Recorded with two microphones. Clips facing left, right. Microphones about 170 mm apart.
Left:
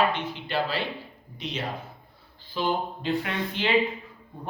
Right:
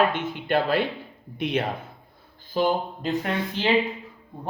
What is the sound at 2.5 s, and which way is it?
Speech, 45° right (ahead or behind).